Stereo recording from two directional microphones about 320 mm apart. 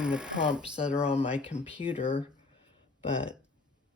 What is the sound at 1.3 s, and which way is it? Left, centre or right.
Speech, centre.